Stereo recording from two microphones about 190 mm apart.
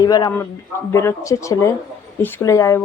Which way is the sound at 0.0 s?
20° left (ahead or behind).